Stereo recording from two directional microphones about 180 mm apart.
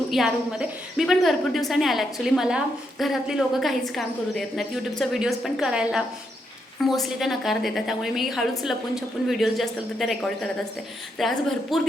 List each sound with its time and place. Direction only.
0.1 s a woman's voice: 5° right (ahead or behind)